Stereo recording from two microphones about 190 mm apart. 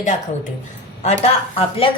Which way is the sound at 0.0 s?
40° left (ahead or behind).